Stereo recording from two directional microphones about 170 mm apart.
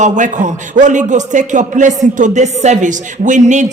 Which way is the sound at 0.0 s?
45° right (ahead or behind).